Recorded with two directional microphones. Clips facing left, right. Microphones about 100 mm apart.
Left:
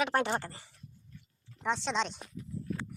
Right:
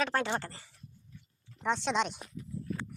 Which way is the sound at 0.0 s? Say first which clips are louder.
Left 1 dB; 20° left (ahead or behind).